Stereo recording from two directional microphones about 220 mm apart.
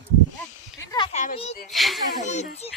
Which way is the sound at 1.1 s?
35° left (ahead or behind).